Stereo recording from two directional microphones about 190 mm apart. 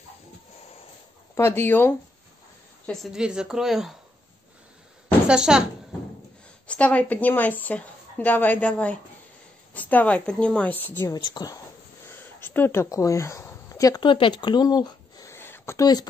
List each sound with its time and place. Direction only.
1.3 s a woman's voice: 10° left (ahead or behind)
2.9 s a woman's voice: centre (ahead or behind)
5.3 s a woman's voice: 5° right (ahead or behind)
6.7 s a woman's voice: 5° left (ahead or behind)